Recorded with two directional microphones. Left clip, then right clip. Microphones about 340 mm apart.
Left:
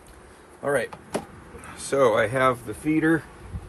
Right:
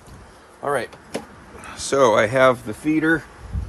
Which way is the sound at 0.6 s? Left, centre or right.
Centre.